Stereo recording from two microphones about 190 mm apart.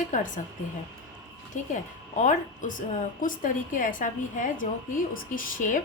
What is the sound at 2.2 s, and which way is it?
A woman's voice, 40° left (ahead or behind).